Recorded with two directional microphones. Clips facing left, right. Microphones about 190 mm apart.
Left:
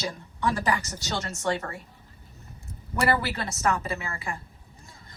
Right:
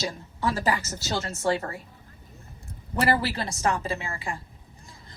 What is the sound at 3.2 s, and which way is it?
A woman's voice, 30° right (ahead or behind).